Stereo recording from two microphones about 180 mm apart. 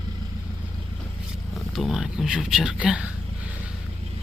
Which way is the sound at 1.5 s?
Centre (ahead or behind).